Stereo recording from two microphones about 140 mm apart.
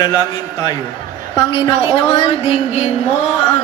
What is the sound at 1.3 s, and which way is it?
A woman's voice, 35° left (ahead or behind).